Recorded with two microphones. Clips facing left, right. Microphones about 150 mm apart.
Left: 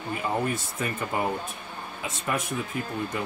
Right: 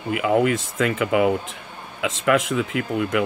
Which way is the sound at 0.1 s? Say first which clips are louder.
Right 9 dB; 90° right.